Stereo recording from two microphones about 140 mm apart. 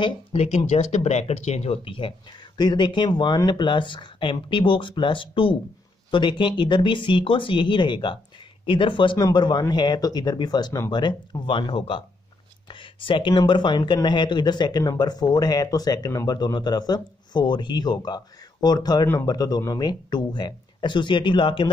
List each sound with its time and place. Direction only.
0.0 s speech: 50° left (ahead or behind)